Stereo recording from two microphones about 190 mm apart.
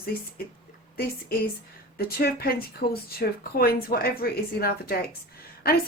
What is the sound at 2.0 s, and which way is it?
Speech, 55° left (ahead or behind).